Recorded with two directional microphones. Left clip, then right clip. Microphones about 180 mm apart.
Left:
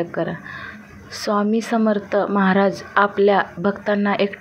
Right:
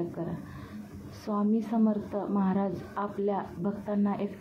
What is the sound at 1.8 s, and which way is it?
A woman's voice, 30° left (ahead or behind).